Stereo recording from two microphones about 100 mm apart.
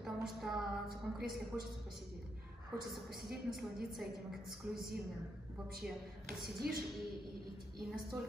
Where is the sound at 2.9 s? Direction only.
5° right (ahead or behind).